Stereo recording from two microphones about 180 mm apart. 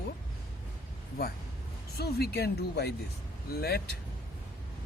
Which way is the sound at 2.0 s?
60° left (ahead or behind).